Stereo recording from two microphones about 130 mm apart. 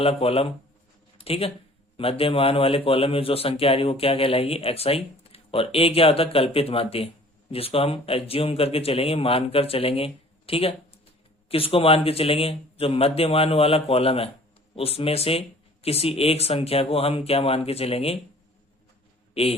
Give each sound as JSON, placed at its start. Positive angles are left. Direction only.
{"t": 0.0, "sound": "a man's voice", "side_deg": 50}
{"t": 19.3, "sound": "a man's voice", "side_deg": 50}